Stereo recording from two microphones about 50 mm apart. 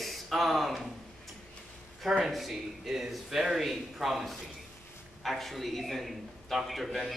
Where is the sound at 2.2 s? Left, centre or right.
Centre.